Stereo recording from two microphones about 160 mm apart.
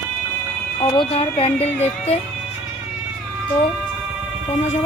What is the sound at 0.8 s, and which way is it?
Speech, 40° left (ahead or behind).